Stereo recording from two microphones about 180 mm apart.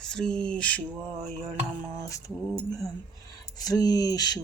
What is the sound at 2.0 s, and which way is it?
Mantra, 15° left (ahead or behind).